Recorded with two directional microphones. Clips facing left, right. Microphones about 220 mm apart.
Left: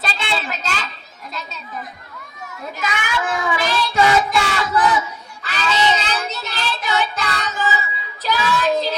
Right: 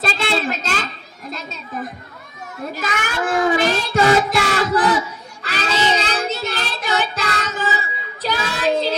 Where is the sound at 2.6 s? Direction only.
35° right (ahead or behind).